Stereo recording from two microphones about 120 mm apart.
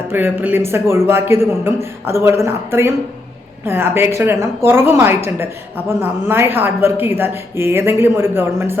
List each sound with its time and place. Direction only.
0.1 s a woman's voice: 15° right (ahead or behind)